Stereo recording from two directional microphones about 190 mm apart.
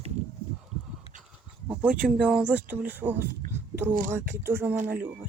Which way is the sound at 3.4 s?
40° right (ahead or behind).